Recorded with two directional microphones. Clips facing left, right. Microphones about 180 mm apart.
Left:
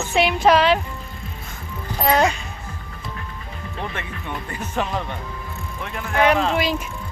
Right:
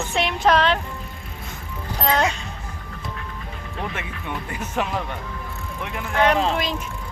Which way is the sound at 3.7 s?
5° right (ahead or behind).